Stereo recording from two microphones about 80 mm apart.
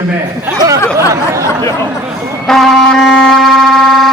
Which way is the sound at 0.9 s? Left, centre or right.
Right.